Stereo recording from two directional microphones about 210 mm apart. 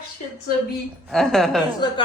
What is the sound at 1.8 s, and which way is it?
Speech, 20° left (ahead or behind).